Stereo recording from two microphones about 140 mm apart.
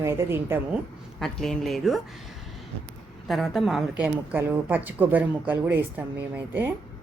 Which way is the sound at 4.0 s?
15° right (ahead or behind).